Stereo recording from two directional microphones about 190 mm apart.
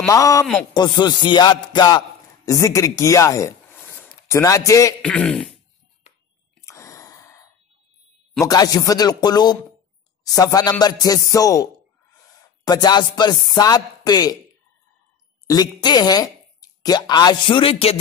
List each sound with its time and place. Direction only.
0.1 s a man's voice: 15° left (ahead or behind)
5.0 s throat clearing: 5° left (ahead or behind)
6.6 s sigh: 15° left (ahead or behind)
8.5 s chopping: 20° left (ahead or behind)
15.4 s speech: 20° left (ahead or behind)